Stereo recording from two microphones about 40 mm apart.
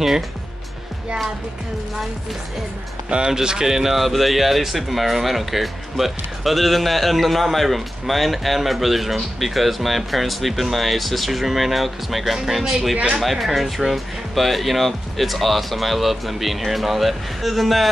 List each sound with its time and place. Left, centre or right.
3.1 s speech: right; by 17.8 s centre